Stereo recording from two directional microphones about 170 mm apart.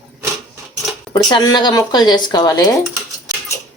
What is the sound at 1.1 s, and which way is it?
Speech, 25° left (ahead or behind).